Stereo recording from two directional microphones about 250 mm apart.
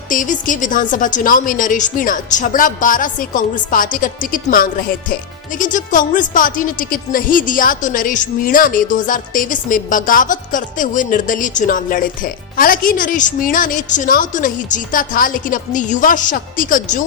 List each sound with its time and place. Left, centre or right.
0.1 s a woman's voice: left